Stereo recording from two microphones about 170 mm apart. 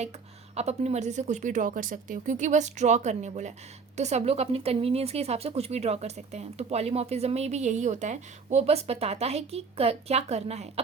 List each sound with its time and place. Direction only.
0.5 s speech: 40° right (ahead or behind)